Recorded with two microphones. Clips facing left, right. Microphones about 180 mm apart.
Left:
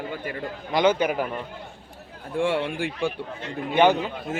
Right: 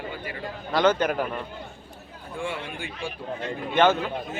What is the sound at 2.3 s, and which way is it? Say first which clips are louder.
Speech: left 8 dB; 65° left (ahead or behind).